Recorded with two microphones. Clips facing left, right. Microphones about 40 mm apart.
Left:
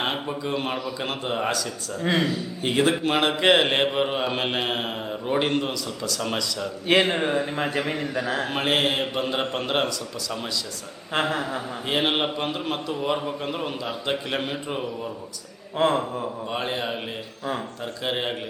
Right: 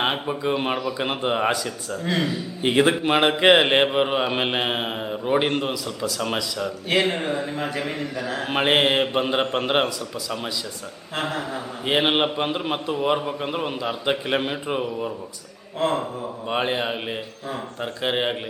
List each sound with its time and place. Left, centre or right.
0.0 s a man's voice: centre
3.0 s mantra: centre
6.8 s a man's voice: left
8.4 s a man's voice: right
11.1 s speech: left
11.9 s mantra: centre
15.8 s speech: left
16.5 s a man's voice: right
18.0 s a man's voice: centre